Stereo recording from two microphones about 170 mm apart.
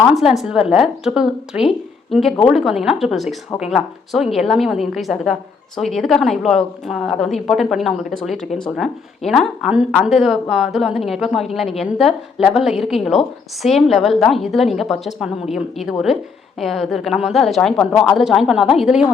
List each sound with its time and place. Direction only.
0.1 s a woman's voice: centre (ahead or behind)